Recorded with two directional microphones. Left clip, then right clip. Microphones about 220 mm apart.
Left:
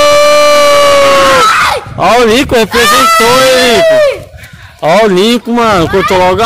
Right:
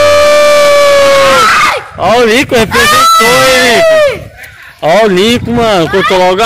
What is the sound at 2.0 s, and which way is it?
Speech, 20° left (ahead or behind).